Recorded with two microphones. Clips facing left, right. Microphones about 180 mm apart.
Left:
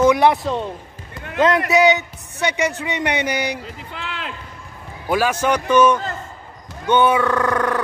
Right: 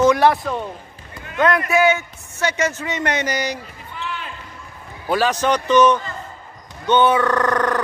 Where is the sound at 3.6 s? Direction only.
90° left.